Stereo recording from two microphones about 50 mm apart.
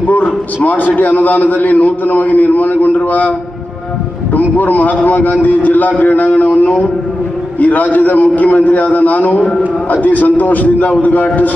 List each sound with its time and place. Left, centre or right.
0.1 s a man's voice: left